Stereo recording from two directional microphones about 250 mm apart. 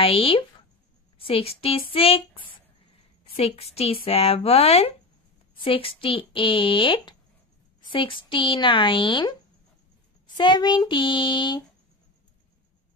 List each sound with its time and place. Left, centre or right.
0.0 s a woman's voice: left
1.9 s a sound: left
3.3 s speech: left
10.3 s speech: centre